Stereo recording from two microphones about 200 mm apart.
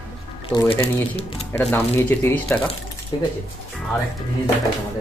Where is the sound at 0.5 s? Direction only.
25° left (ahead or behind).